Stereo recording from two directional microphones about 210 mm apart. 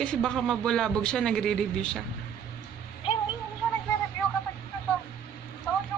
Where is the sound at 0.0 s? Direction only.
5° left (ahead or behind).